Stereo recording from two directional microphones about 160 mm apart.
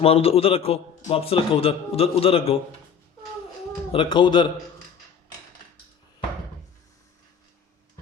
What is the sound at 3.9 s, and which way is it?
Speech, 30° left (ahead or behind).